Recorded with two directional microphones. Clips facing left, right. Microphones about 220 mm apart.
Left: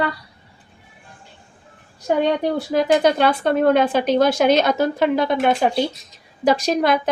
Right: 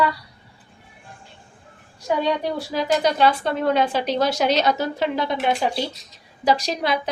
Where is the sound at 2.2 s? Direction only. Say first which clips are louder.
Left 4 dB; 50° left (ahead or behind).